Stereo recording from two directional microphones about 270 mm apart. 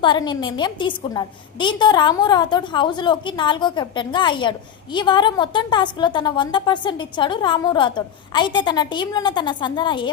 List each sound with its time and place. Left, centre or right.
0.0 s a woman's voice: centre